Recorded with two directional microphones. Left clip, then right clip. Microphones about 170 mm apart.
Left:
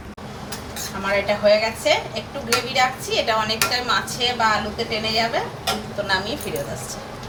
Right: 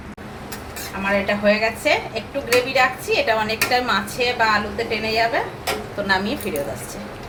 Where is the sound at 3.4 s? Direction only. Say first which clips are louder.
Right 2 dB; 60° right (ahead or behind).